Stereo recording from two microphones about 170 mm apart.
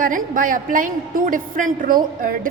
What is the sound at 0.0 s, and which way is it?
A woman's voice, 55° right (ahead or behind).